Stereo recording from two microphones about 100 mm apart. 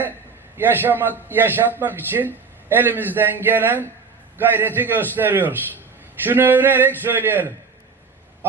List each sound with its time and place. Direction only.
0.5 s a man's voice: 20° right (ahead or behind)